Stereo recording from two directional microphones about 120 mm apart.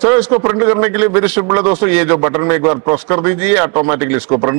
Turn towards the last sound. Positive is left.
turn(degrees=-25)  # may be behind; listen again after turning